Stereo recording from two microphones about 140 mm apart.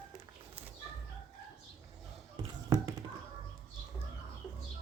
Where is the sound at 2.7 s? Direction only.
25° right (ahead or behind).